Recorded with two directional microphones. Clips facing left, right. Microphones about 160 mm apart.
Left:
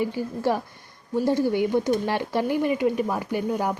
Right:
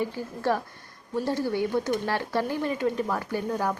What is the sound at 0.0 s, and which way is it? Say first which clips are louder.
Speech: left 4 dB; 15° left (ahead or behind).